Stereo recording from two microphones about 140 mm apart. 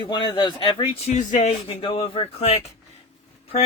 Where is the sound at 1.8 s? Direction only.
40° left (ahead or behind).